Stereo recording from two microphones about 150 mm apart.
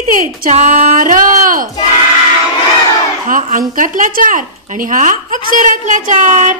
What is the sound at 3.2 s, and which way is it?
Speech, 65° right (ahead or behind).